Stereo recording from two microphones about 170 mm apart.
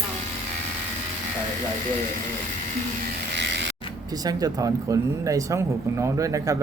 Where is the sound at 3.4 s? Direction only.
90° right.